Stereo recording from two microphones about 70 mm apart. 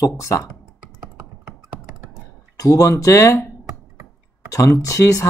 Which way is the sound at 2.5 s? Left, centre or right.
Left.